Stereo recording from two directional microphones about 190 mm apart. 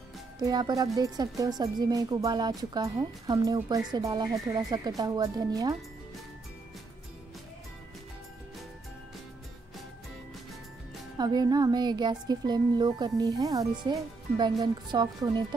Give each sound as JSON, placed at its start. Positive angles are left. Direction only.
{"t": 0.4, "sound": "speech", "side_deg": -20}
{"t": 11.1, "sound": "speech", "side_deg": -20}